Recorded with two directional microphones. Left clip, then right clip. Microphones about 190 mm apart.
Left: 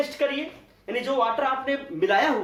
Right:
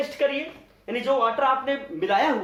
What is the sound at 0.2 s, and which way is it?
Speech, 15° right (ahead or behind).